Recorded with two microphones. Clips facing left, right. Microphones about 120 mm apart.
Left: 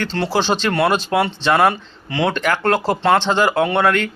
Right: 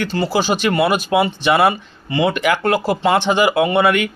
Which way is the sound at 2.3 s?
15° right (ahead or behind).